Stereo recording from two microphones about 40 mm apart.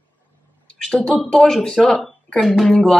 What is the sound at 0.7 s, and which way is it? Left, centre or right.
Speech, left.